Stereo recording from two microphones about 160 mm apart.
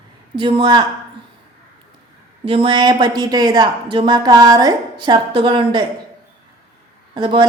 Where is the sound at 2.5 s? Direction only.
35° right (ahead or behind).